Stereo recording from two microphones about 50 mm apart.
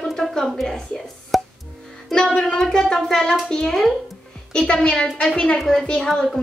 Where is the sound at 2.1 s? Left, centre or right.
Centre.